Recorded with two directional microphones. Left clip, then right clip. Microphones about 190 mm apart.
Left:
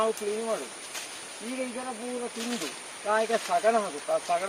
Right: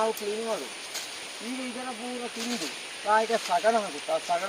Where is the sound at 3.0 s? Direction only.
15° left (ahead or behind).